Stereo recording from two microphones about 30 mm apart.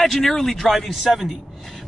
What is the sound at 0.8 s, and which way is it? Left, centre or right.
Speech, centre.